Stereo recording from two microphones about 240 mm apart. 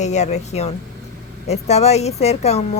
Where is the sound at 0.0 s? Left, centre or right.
Left.